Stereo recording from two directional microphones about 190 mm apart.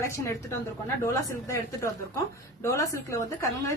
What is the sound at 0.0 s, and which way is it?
A woman's voice, 15° left (ahead or behind).